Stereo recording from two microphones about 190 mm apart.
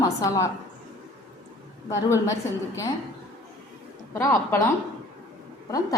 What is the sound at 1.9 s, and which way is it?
Speech, 15° left (ahead or behind).